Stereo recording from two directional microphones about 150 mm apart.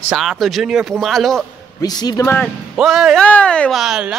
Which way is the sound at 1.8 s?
25° left (ahead or behind).